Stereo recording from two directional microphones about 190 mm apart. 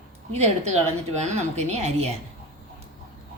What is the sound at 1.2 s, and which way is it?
Speech, 35° right (ahead or behind).